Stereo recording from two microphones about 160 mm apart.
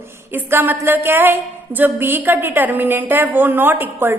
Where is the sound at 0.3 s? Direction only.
10° right (ahead or behind).